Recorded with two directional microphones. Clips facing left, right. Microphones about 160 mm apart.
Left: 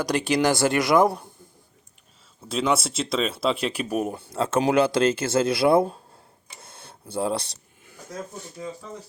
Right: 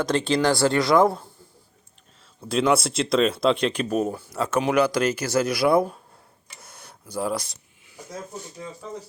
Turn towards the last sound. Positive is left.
turn(degrees=30)  # may be behind; listen again after turning